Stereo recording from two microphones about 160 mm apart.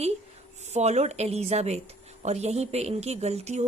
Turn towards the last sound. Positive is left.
turn(degrees=-45)  # may be behind; listen again after turning